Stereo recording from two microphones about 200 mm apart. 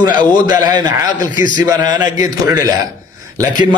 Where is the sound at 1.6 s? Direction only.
20° right (ahead or behind).